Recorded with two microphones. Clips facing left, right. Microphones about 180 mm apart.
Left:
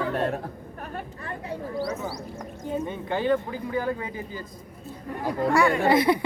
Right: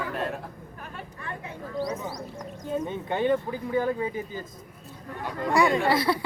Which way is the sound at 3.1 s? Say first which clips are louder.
Even; 20° right (ahead or behind).